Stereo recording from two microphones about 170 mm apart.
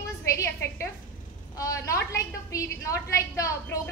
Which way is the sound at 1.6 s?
20° left (ahead or behind).